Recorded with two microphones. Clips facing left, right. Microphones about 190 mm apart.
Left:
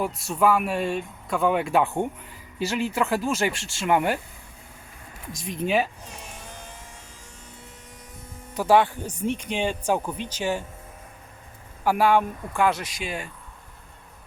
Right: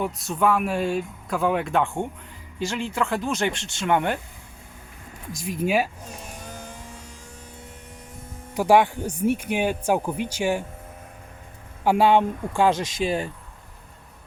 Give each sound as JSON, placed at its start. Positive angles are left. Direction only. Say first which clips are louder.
{"t": 0.0, "sound": "speech", "louder": "left 1 dB", "side_deg": 0}
{"t": 5.4, "sound": "speech", "louder": "right 1 dB", "side_deg": -5}
{"t": 8.5, "sound": "speech", "louder": "right 1 dB", "side_deg": -15}
{"t": 11.8, "sound": "speech", "louder": "right 2 dB", "side_deg": -20}